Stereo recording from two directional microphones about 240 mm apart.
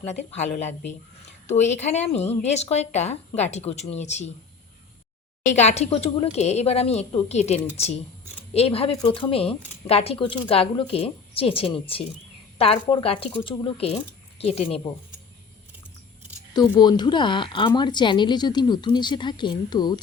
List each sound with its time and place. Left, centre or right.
0.0 s speech: left
5.5 s speech: left
16.8 s speech: centre